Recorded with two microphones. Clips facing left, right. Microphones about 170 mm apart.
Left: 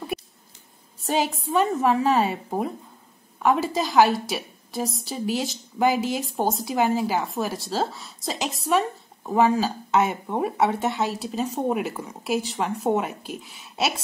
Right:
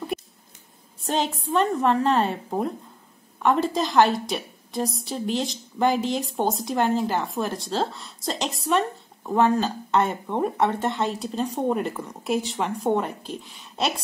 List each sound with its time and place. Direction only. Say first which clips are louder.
1.0 s a woman's voice: left 1 dB; 5° left (ahead or behind)